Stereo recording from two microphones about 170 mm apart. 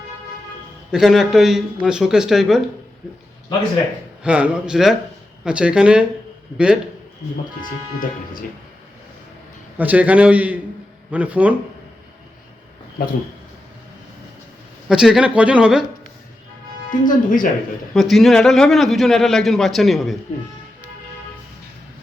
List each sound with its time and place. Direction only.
0.9 s a man's voice: centre (ahead or behind)
4.2 s a man's voice: 5° right (ahead or behind)
7.9 s speech: 55° left (ahead or behind)
9.7 s a man's voice: 10° right (ahead or behind)
14.8 s a man's voice: 5° right (ahead or behind)
16.9 s speech: 50° left (ahead or behind)
17.9 s a man's voice: centre (ahead or behind)